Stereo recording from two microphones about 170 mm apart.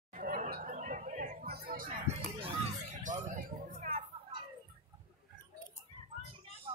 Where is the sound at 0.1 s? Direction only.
55° right (ahead or behind).